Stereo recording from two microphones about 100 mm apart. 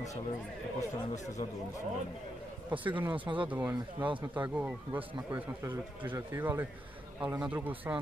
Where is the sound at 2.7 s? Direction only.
15° right (ahead or behind).